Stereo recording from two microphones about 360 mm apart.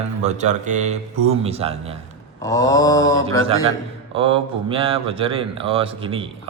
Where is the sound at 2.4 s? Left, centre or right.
Centre.